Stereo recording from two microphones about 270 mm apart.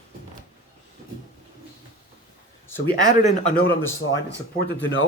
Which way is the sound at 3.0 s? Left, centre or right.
Left.